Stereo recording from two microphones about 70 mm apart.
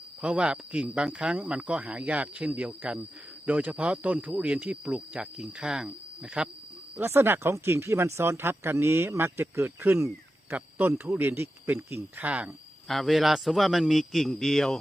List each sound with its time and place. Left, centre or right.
0.2 s speech: centre
6.9 s speech: right
12.9 s a man's voice: centre